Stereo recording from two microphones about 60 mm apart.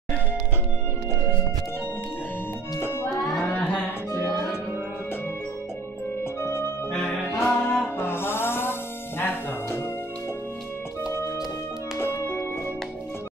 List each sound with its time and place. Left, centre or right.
2.8 s music: left
4.1 s music: left
6.4 s organ: left
7.2 s music: left
12.0 s music: left